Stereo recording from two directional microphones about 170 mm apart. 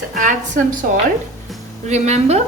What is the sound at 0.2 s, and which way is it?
Speech, 45° right (ahead or behind).